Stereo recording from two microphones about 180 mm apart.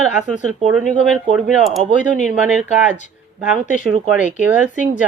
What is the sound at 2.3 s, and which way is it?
Speech, centre (ahead or behind).